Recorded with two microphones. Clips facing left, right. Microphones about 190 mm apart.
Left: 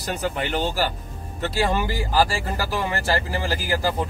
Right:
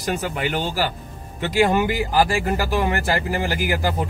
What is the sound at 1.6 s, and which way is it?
Speech, 15° right (ahead or behind).